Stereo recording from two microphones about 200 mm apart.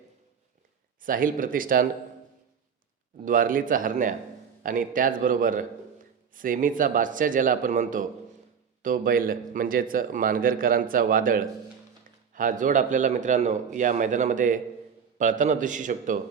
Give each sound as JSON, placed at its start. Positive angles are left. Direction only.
{"t": 1.0, "sound": "speech", "side_deg": -45}
{"t": 3.2, "sound": "a man's voice", "side_deg": -40}